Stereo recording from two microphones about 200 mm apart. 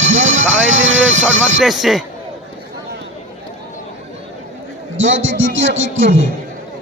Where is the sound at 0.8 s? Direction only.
70° right (ahead or behind).